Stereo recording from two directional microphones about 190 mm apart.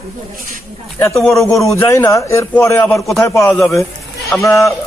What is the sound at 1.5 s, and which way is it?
Speech, 15° left (ahead or behind).